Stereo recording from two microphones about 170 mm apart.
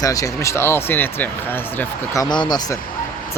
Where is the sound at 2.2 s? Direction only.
25° left (ahead or behind).